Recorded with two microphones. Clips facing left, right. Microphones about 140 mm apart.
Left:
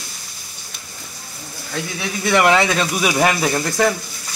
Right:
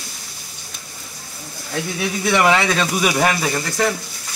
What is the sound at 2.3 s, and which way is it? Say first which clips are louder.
Speech: left 2 dB; centre (ahead or behind).